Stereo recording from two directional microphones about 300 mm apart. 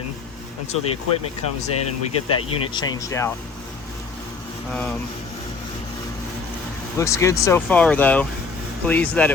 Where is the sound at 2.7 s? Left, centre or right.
Centre.